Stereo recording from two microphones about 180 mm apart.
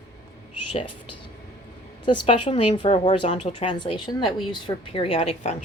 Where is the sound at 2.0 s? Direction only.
25° left (ahead or behind).